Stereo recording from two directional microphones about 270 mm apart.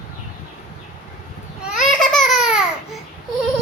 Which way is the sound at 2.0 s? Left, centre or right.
Centre.